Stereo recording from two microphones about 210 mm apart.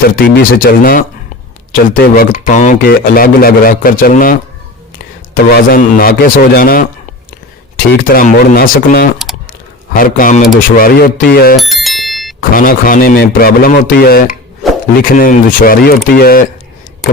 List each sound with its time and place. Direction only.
0.2 s speech: 50° left (ahead or behind)
8.1 s speech: 45° left (ahead or behind)
9.5 s a sound: 40° left (ahead or behind)
10.8 s speech: 45° left (ahead or behind)
11.5 s bicycle bell: centre (ahead or behind)
12.4 s speech: 45° left (ahead or behind)